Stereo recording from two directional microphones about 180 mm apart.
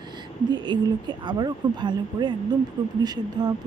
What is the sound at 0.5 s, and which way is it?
Speech, 25° right (ahead or behind).